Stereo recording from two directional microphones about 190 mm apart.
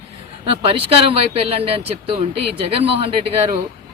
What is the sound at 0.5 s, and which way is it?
Speech, 30° right (ahead or behind).